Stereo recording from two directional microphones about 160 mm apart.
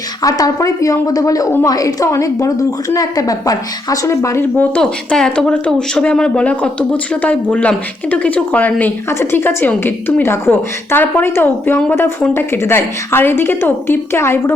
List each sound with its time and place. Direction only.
0.2 s a woman's voice: 20° left (ahead or behind)